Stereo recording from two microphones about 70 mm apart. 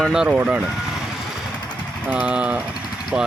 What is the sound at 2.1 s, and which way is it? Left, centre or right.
Speech, centre.